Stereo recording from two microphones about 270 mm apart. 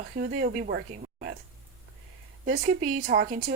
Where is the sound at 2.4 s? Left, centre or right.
Right.